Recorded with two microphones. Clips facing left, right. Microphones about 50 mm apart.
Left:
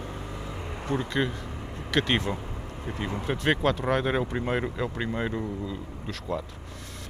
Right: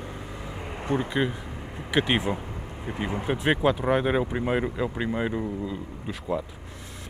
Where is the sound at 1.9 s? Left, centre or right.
Centre.